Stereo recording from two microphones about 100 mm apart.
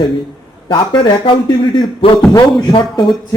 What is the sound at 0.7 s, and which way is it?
A man's voice, 60° left (ahead or behind).